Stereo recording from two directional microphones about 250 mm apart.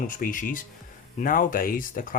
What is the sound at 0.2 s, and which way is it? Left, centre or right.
Speech, left.